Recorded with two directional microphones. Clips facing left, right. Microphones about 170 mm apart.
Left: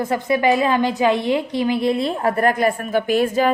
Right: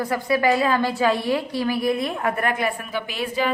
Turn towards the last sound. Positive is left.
turn(degrees=45)  # may be behind; listen again after turning